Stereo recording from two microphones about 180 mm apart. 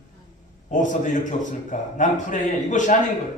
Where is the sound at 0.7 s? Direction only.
45° left (ahead or behind).